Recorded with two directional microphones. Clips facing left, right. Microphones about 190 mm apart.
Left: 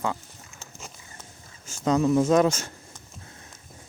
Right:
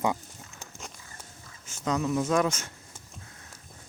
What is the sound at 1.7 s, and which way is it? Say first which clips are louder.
Speech: left 6 dB; 35° left (ahead or behind).